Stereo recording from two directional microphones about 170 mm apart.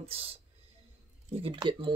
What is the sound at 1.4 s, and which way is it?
Speech, 30° right (ahead or behind).